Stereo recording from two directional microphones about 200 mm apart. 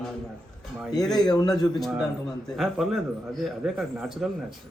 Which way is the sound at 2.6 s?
Centre (ahead or behind).